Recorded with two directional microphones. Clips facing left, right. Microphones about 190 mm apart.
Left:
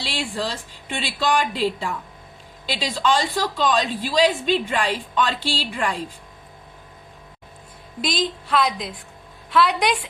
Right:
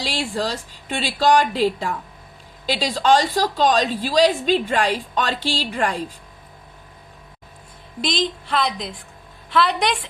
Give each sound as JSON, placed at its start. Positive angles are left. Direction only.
{"t": 0.0, "sound": "a woman's voice", "side_deg": -40}
{"t": 8.0, "sound": "a woman's voice", "side_deg": 5}